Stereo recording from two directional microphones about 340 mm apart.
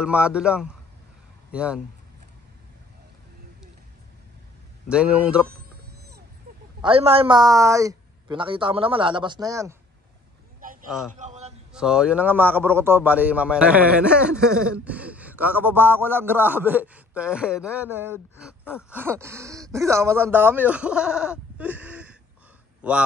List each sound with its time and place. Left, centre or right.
0.0 s a man's voice: centre
4.8 s a man's voice: centre
6.8 s speech: centre
10.9 s a man's voice: centre
11.1 s a sound: centre
11.7 s a man's voice: centre
18.9 s a man's voice: centre